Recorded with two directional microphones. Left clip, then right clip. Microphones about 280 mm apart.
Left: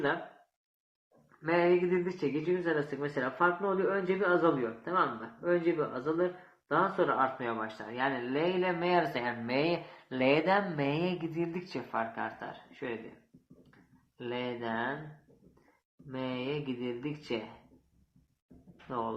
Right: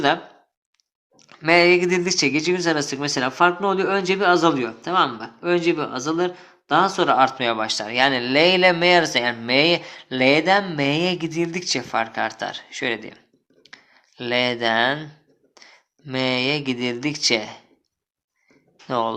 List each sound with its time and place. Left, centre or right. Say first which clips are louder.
1.4 s speech: right 12 dB; right
14.2 s speech: right 15 dB; right
16.0 s speech: right 15 dB; right
18.9 s speech: right 13 dB; right